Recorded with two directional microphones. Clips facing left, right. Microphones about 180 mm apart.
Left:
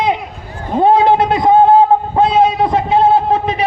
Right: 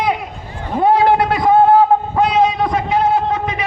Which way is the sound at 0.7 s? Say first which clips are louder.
Left 2 dB; 20° left (ahead or behind).